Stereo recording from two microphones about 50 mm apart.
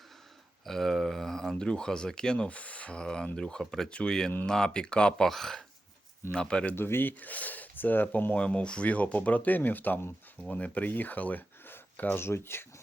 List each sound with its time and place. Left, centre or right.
0.6 s speech: centre
2.5 s speech: left
3.6 s speech: centre
3.8 s speech: centre
6.3 s speech: centre
6.7 s speech: left
7.2 s speech: left
8.4 s speech: left
12.2 s speech: left